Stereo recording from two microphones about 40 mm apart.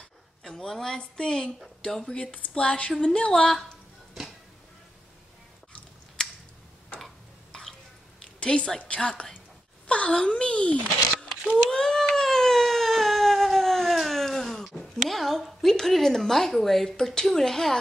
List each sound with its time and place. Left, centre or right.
0.4 s a woman's voice: centre
1.8 s a woman's voice: left
6.2 s camera: centre
8.4 s a woman's voice: left
11.7 s cat: centre
12.2 s a sound: centre
14.8 s a woman's voice: centre
16.9 s a woman's voice: centre